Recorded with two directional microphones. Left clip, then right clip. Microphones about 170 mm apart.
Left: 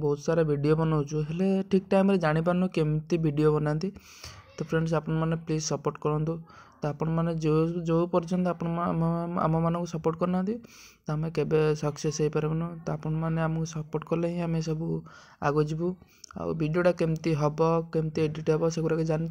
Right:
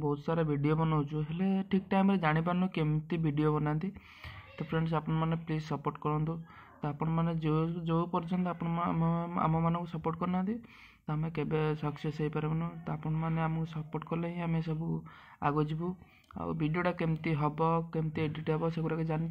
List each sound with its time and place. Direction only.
0.0 s speech: 25° left (ahead or behind)